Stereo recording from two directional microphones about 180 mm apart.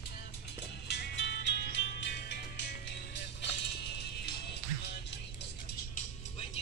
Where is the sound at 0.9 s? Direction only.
70° left (ahead or behind).